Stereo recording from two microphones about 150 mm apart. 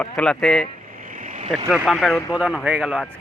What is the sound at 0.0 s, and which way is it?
Speech, 5° left (ahead or behind).